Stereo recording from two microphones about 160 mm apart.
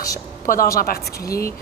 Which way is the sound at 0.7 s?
70° left (ahead or behind).